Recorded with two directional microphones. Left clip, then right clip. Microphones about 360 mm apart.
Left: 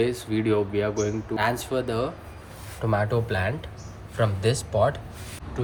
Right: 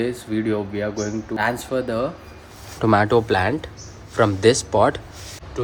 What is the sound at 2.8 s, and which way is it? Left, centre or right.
Speech, right.